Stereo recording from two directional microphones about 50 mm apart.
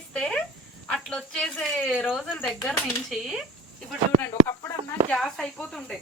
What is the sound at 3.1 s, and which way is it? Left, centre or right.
Speech, centre.